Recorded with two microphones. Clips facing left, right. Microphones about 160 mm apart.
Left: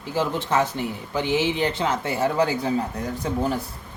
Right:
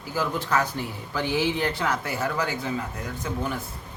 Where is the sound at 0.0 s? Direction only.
25° left (ahead or behind).